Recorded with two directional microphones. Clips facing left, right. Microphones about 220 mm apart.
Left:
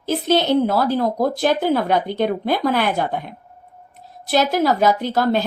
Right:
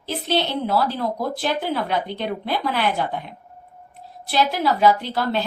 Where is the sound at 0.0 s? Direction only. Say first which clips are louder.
Left 5 dB; 45° left (ahead or behind).